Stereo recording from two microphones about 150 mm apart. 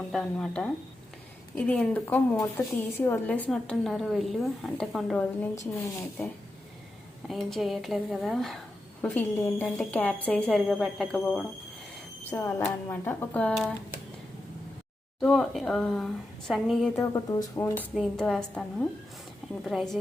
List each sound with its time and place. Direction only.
0.1 s a woman's voice: 5° left (ahead or behind)
7.3 s a woman's voice: centre (ahead or behind)
12.3 s a woman's voice: 15° left (ahead or behind)
15.2 s a woman's voice: centre (ahead or behind)
16.9 s a woman's voice: 20° left (ahead or behind)
17.9 s a woman's voice: 5° left (ahead or behind)